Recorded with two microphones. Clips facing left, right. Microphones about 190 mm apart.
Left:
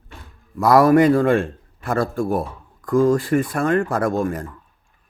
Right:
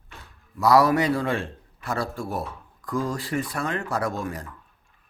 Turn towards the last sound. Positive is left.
turn(degrees=50)  # may be behind; listen again after turning